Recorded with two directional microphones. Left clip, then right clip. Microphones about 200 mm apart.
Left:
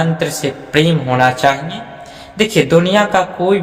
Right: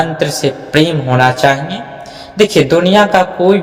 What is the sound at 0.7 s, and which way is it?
Speech, 20° right (ahead or behind).